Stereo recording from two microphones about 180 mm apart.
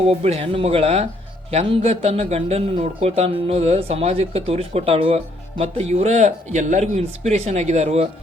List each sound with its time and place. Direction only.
0.0 s speech: 35° right (ahead or behind)